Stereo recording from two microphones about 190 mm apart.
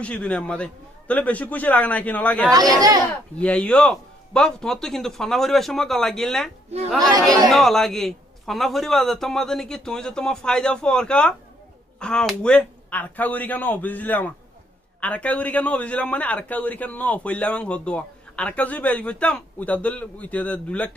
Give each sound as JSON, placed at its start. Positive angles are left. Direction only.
{"t": 0.0, "sound": "a man's voice", "side_deg": 5}
{"t": 2.5, "sound": "speech", "side_deg": -20}
{"t": 3.1, "sound": "a man's voice", "side_deg": 5}
{"t": 7.0, "sound": "speech", "side_deg": -20}
{"t": 7.4, "sound": "a man's voice", "side_deg": 0}